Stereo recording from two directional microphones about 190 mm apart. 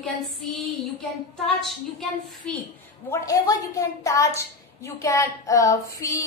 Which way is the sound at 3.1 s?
15° left (ahead or behind).